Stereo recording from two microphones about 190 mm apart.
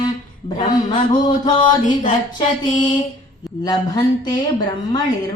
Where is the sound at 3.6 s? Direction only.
20° left (ahead or behind).